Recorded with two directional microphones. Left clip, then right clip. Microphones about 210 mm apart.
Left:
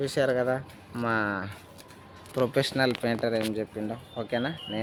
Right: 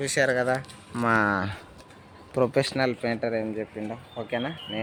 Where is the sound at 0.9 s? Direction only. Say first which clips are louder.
Right 5 dB; 35° right (ahead or behind).